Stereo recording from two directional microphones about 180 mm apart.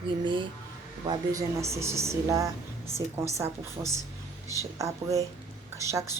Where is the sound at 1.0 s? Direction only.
20° right (ahead or behind).